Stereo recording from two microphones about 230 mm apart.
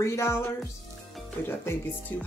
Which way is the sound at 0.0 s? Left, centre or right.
Centre.